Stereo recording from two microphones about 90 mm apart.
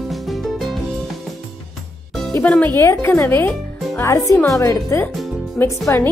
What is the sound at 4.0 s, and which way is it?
Speech, 35° left (ahead or behind).